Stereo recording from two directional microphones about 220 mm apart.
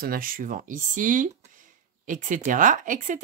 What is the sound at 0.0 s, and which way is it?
Speech, 40° right (ahead or behind).